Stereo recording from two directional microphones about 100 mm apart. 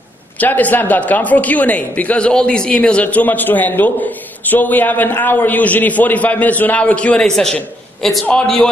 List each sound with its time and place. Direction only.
0.4 s a man's voice: 15° left (ahead or behind)